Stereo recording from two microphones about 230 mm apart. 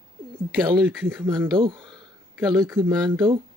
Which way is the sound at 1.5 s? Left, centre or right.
Right.